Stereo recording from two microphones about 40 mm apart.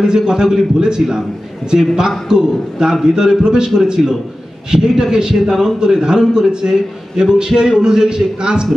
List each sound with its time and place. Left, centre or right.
0.0 s a man's voice: centre